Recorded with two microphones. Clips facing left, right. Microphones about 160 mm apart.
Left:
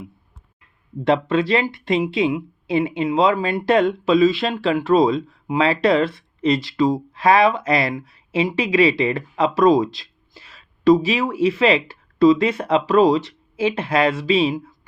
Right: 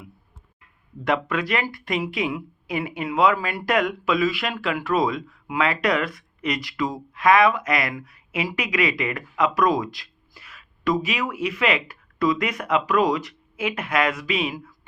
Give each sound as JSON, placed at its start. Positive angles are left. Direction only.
{"t": 1.0, "sound": "speech", "side_deg": 25}